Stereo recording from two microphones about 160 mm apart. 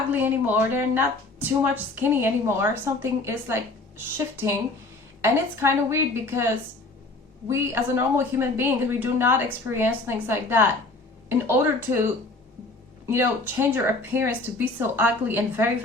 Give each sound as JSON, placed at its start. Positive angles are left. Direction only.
{"t": 0.1, "sound": "speech", "side_deg": -10}
{"t": 13.1, "sound": "speech", "side_deg": -15}